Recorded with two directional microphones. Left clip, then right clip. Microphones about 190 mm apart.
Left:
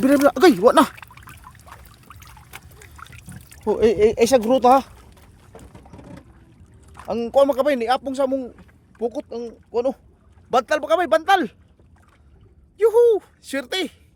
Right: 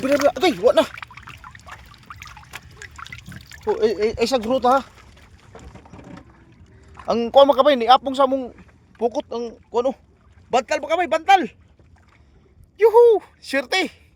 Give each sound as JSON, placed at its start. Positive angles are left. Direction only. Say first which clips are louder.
{"t": 0.3, "sound": "speech", "louder": "left 4 dB", "side_deg": 45}
{"t": 1.4, "sound": "pour", "louder": "right 4 dB", "side_deg": 5}
{"t": 3.6, "sound": "speech", "louder": "left 3 dB", "side_deg": 55}
{"t": 6.9, "sound": "speech", "louder": "right 4 dB", "side_deg": -10}
{"t": 10.5, "sound": "speech", "louder": "left 2 dB", "side_deg": 15}
{"t": 12.7, "sound": "speech", "louder": "right 3 dB", "side_deg": 5}